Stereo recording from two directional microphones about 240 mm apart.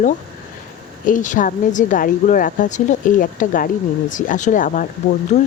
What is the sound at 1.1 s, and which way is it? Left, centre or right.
A woman's voice, left.